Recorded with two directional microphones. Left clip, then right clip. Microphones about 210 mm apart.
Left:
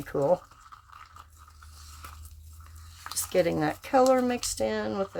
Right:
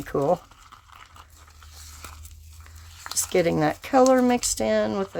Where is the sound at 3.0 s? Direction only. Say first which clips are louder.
Right 3 dB; 25° right (ahead or behind).